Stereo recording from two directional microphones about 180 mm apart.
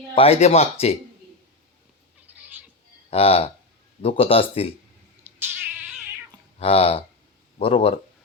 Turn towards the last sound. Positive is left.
turn(degrees=30)  # may be behind; listen again after turning